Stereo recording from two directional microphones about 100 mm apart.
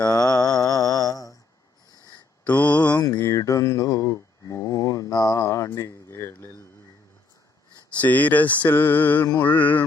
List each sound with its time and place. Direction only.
0.0 s a sound: 10° left (ahead or behind)
0.4 s mantra: 40° left (ahead or behind)
2.5 s mantra: 15° left (ahead or behind)
3.2 s mantra: 30° left (ahead or behind)
8.0 s mantra: 15° left (ahead or behind)